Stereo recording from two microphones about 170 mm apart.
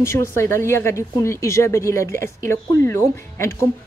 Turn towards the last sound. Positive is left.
turn(degrees=15)  # may be behind; listen again after turning